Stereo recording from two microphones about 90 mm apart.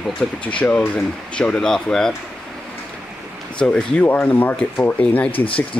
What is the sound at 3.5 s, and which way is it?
Speech, 10° left (ahead or behind).